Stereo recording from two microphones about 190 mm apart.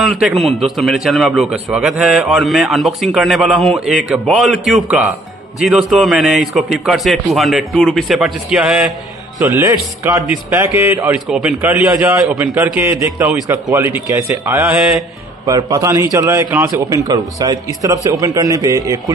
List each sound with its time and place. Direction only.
0.0 s a man's voice: centre (ahead or behind)
9.4 s a man's voice: 15° right (ahead or behind)
15.4 s a man's voice: 15° right (ahead or behind)